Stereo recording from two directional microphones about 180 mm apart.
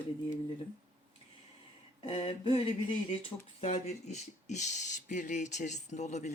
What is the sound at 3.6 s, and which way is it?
Speech, 35° left (ahead or behind).